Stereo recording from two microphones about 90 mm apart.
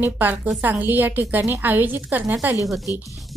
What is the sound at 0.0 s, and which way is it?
A woman's voice, 20° right (ahead or behind).